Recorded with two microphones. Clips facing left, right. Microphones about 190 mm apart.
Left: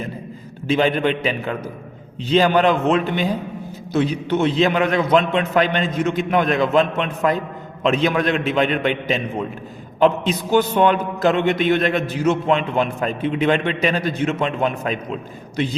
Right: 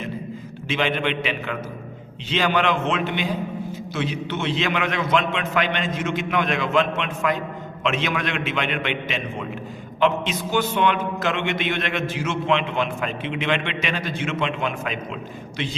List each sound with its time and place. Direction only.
0.7 s a man's voice: 40° left (ahead or behind)